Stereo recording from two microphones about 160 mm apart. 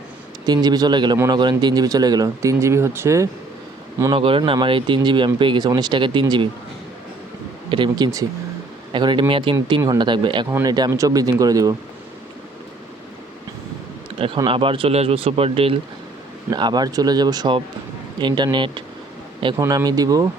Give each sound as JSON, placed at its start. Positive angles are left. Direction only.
{"t": 0.4, "sound": "speech", "side_deg": -25}
{"t": 4.0, "sound": "speech", "side_deg": -30}
{"t": 7.7, "sound": "speech", "side_deg": -30}
{"t": 14.2, "sound": "speech", "side_deg": -30}
{"t": 16.5, "sound": "speech", "side_deg": -25}